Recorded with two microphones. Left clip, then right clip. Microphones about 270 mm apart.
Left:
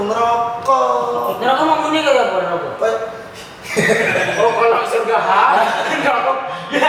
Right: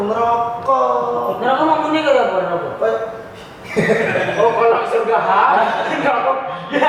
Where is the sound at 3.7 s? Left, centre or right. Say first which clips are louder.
Left 1 dB; centre.